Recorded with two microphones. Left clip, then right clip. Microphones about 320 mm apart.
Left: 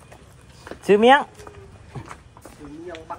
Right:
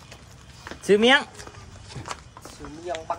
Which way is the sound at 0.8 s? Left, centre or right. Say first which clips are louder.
Left 4 dB; centre.